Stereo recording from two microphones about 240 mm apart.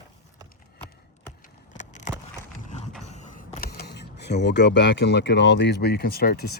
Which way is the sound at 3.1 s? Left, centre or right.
Left.